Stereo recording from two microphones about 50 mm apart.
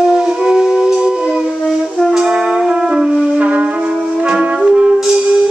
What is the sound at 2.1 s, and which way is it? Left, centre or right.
Brass instrument, centre.